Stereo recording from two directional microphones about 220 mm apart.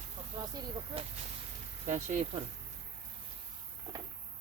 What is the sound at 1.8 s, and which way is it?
Speech, 35° right (ahead or behind).